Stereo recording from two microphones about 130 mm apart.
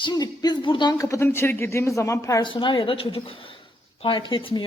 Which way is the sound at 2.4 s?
40° left (ahead or behind).